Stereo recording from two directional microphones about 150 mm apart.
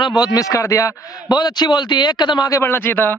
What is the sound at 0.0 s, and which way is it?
A man's voice, 30° left (ahead or behind).